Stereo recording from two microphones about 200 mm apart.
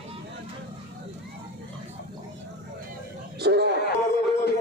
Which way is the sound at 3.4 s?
55° right (ahead or behind).